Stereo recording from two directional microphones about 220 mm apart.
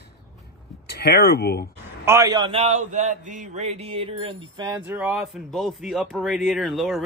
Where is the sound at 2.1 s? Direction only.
15° right (ahead or behind).